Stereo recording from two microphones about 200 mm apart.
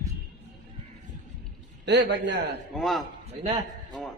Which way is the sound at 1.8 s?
60° right (ahead or behind).